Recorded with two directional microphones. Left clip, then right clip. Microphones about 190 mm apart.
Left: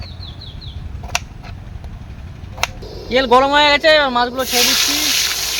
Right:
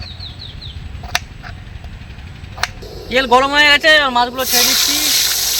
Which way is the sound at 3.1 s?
40° left (ahead or behind).